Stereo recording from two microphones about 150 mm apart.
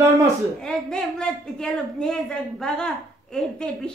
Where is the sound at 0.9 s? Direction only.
5° left (ahead or behind).